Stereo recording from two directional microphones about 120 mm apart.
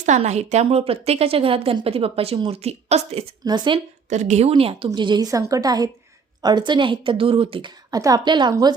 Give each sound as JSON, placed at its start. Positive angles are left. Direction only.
{"t": 0.2, "sound": "a woman's voice", "side_deg": -70}
{"t": 3.4, "sound": "a woman's voice", "side_deg": -40}
{"t": 4.1, "sound": "a woman's voice", "side_deg": -75}
{"t": 4.9, "sound": "a woman's voice", "side_deg": -40}
{"t": 7.9, "sound": "a woman's voice", "side_deg": -30}